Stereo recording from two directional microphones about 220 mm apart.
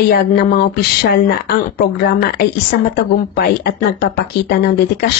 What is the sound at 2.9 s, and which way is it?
A woman's voice, 45° left (ahead or behind).